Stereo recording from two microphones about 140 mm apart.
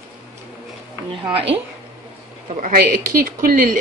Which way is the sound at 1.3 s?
40° right (ahead or behind).